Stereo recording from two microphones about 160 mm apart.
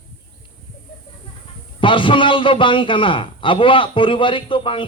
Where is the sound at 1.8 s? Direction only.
30° left (ahead or behind).